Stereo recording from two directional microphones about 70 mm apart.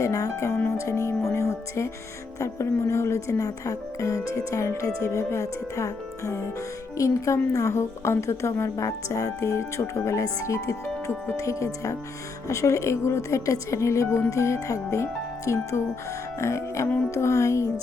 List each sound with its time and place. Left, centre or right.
0.0 s a woman's voice: left
0.8 s music: left
2.4 s a woman's voice: left